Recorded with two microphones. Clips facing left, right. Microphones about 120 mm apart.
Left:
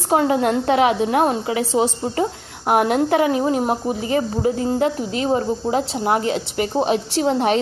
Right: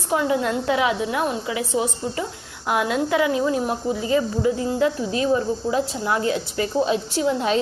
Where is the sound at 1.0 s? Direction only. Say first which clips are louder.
Left 6 dB; 50° left (ahead or behind).